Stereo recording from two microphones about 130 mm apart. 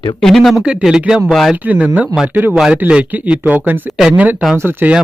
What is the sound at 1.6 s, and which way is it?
Speech, 10° right (ahead or behind).